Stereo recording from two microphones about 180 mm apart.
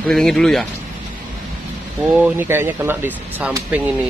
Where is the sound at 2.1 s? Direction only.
10° right (ahead or behind).